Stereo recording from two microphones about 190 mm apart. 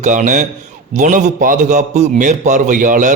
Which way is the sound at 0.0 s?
40° right (ahead or behind).